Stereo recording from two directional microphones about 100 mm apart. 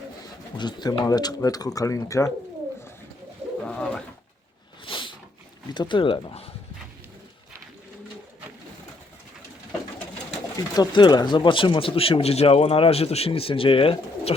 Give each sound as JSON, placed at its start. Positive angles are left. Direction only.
{"t": 0.5, "sound": "speech", "side_deg": 45}
{"t": 3.6, "sound": "bird", "side_deg": 10}
{"t": 4.9, "sound": "a sound", "side_deg": 55}
{"t": 5.7, "sound": "speech", "side_deg": 50}
{"t": 10.8, "sound": "speech", "side_deg": 45}